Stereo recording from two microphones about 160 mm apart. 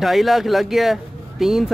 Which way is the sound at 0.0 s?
Centre (ahead or behind).